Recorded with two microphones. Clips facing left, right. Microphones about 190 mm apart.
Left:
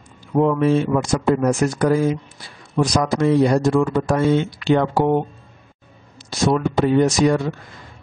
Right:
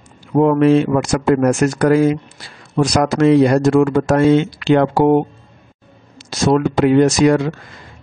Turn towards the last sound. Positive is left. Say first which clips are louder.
# right 4 dB
turn(degrees=-85)